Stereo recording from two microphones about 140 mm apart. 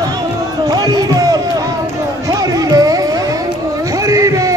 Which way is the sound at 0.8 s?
25° right (ahead or behind).